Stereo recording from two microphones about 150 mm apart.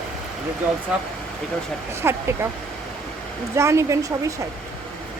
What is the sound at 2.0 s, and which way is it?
Speech, 15° right (ahead or behind).